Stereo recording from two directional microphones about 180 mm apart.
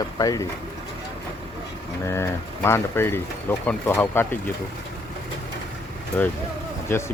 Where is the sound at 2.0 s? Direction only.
15° left (ahead or behind).